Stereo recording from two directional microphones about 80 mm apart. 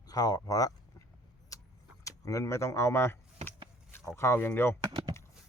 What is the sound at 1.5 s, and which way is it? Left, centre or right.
Vehicle, left.